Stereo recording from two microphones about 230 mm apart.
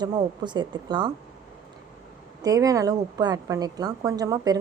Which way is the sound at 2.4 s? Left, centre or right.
Centre.